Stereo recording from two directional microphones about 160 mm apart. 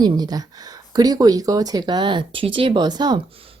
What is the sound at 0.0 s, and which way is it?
A woman's voice, 25° right (ahead or behind).